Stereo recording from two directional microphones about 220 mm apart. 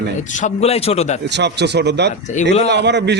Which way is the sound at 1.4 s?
50° right (ahead or behind).